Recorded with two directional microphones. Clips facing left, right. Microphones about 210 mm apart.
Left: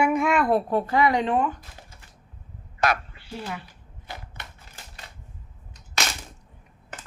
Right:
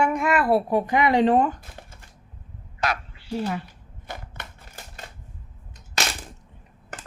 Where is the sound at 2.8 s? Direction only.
55° left (ahead or behind).